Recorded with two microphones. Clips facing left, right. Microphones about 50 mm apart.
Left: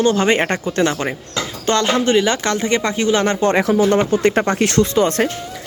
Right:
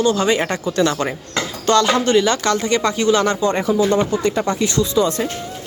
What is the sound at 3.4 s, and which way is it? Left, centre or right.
Speech, left.